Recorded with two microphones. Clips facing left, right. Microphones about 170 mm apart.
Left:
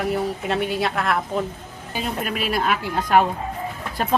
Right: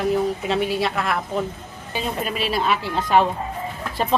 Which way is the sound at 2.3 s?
50° left (ahead or behind).